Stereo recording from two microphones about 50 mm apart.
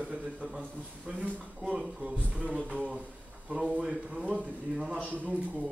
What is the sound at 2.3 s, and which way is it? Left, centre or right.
A man's voice, right.